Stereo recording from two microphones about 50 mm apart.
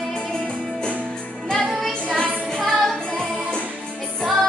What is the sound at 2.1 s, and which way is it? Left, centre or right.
Music, centre.